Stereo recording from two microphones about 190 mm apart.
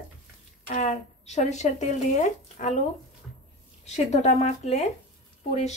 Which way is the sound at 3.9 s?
35° left (ahead or behind).